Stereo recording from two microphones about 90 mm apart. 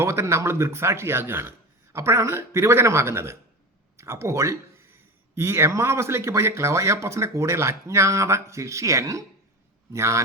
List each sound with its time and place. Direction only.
0.0 s speech: 30° right (ahead or behind)